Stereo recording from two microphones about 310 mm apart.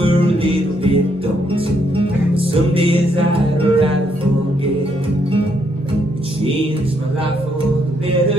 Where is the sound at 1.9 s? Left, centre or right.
Centre.